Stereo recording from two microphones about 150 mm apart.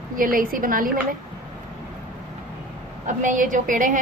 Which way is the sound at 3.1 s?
60° right (ahead or behind).